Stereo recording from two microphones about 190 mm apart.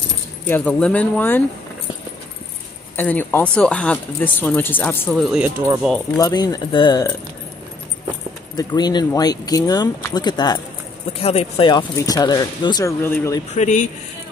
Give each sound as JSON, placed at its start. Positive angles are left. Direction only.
{"t": 0.5, "sound": "speech", "side_deg": 10}
{"t": 3.0, "sound": "speech", "side_deg": 10}
{"t": 5.2, "sound": "speech", "side_deg": -5}
{"t": 6.1, "sound": "speech", "side_deg": 20}
{"t": 8.5, "sound": "speech", "side_deg": 20}
{"t": 11.1, "sound": "speech", "side_deg": 30}
{"t": 13.5, "sound": "speech", "side_deg": 40}